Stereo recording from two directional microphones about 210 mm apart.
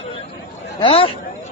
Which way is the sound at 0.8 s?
25° left (ahead or behind).